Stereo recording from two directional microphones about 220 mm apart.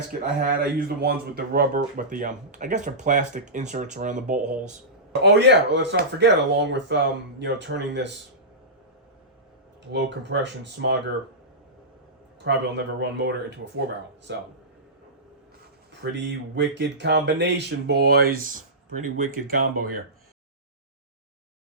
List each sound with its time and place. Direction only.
0.6 s speech: 45° right (ahead or behind)
5.2 s speech: 50° right (ahead or behind)
9.9 s speech: 55° right (ahead or behind)
12.5 s speech: 50° right (ahead or behind)
15.9 s speech: 55° right (ahead or behind)